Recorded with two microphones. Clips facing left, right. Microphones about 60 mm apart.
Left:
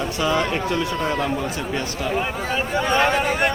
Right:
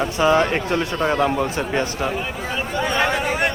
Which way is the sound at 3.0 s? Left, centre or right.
Centre.